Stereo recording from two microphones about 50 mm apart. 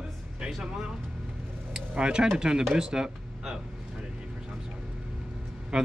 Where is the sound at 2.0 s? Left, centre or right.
Centre.